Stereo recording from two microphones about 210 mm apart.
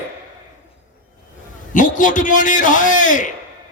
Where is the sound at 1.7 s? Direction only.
40° left (ahead or behind).